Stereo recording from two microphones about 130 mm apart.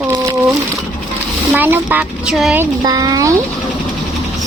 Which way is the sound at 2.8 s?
30° right (ahead or behind).